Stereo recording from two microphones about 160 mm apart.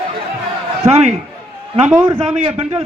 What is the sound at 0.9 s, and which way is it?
Speech, 40° right (ahead or behind).